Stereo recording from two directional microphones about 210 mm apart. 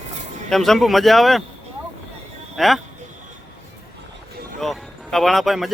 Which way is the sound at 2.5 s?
Centre (ahead or behind).